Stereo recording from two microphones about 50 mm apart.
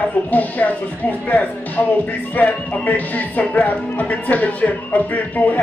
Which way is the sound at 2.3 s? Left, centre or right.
Left.